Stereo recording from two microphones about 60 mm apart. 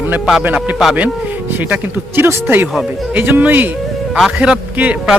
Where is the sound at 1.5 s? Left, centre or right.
Right.